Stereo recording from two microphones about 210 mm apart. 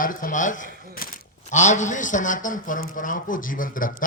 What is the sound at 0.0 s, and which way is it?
A man's voice, 40° left (ahead or behind).